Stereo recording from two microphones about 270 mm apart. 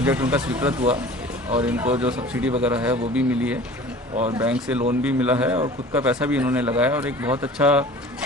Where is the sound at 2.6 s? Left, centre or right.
Centre.